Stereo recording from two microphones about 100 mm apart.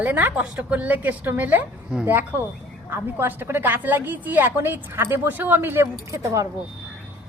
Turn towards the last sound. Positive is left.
turn(degrees=-35)  # may be behind; listen again after turning